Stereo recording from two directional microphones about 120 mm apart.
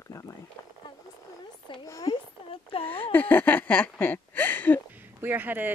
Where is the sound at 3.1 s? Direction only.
15° left (ahead or behind).